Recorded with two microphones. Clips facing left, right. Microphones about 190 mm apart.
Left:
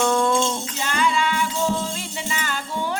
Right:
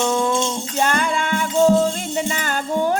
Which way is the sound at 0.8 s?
50° right (ahead or behind).